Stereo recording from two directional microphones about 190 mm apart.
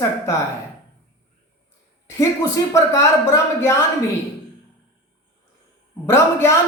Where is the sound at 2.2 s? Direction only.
15° left (ahead or behind).